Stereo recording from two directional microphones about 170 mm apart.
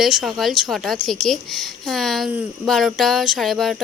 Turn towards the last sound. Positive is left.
turn(degrees=0)  # may be behind; listen again after turning